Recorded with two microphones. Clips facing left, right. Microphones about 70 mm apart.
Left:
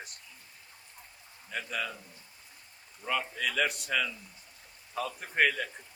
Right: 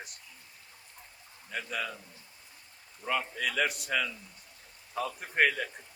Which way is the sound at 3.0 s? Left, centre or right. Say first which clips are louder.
Even; centre.